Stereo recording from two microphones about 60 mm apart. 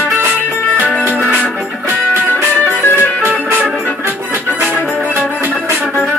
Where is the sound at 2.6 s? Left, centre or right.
Left.